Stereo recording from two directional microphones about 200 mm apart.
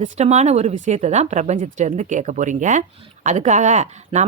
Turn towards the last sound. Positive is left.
turn(degrees=-35)  # may be behind; listen again after turning